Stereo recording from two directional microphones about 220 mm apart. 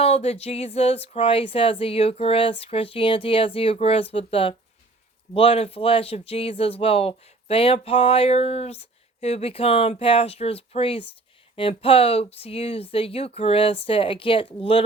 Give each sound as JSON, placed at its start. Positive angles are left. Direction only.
{"t": 0.0, "sound": "speech", "side_deg": 30}